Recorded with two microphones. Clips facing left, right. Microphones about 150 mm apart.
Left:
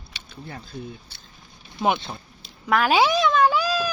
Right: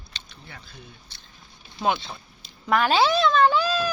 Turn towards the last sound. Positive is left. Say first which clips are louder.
# even
turn(degrees=10)  # may be behind; listen again after turning